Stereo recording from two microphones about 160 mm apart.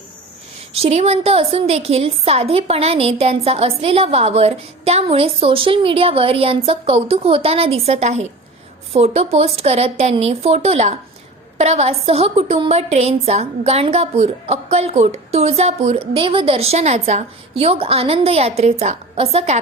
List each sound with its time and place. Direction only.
0.8 s a woman's voice: 40° right (ahead or behind)